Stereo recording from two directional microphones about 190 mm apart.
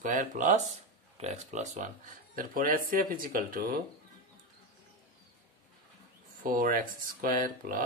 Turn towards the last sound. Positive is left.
turn(degrees=-45)  # may be behind; listen again after turning